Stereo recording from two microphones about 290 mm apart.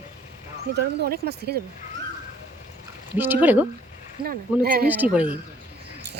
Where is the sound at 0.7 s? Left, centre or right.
Right.